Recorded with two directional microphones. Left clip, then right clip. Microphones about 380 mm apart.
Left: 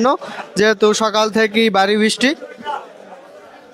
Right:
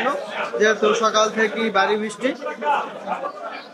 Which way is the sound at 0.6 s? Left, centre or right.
Left.